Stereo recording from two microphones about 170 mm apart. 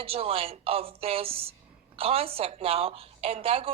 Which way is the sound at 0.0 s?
35° right (ahead or behind).